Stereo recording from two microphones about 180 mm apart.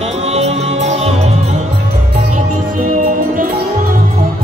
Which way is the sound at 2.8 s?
45° right (ahead or behind).